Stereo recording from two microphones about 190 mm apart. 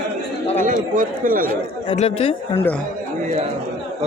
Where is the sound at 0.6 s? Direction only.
45° right (ahead or behind).